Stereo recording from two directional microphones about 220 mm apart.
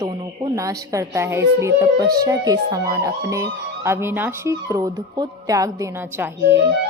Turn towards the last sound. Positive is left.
turn(degrees=-10)  # may be behind; listen again after turning